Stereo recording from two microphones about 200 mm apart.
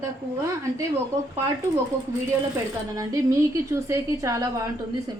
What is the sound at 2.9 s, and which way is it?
A woman's voice, 15° right (ahead or behind).